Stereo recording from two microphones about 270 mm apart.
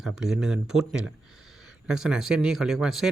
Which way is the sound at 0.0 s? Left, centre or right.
Centre.